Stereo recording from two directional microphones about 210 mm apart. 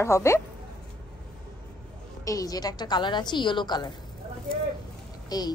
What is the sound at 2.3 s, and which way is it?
A woman's voice, 15° left (ahead or behind).